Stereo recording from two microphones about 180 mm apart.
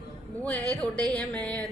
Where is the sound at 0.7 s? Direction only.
5° left (ahead or behind).